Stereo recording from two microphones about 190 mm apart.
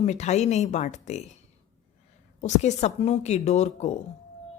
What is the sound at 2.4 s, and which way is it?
A woman's voice, 40° left (ahead or behind).